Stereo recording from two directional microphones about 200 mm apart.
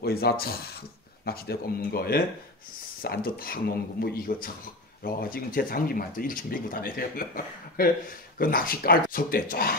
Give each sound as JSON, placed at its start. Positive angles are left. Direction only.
{"t": 0.0, "sound": "speech", "side_deg": 50}